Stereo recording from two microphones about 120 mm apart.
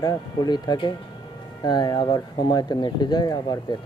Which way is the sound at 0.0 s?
35° left (ahead or behind).